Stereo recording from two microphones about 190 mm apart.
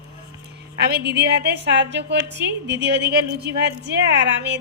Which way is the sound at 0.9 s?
60° right (ahead or behind).